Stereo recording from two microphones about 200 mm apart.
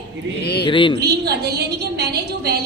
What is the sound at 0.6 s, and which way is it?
Speech, 25° left (ahead or behind).